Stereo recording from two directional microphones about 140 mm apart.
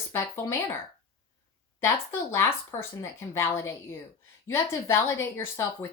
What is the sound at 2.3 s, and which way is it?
A woman's voice, 20° left (ahead or behind).